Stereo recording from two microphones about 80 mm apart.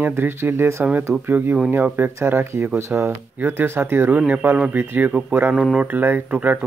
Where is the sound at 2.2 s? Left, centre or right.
Right.